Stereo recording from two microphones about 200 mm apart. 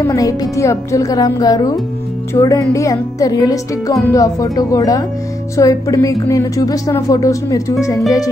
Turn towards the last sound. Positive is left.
turn(degrees=15)  # may be behind; listen again after turning